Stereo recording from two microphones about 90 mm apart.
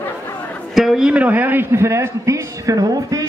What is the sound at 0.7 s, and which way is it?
A man's voice, centre (ahead or behind).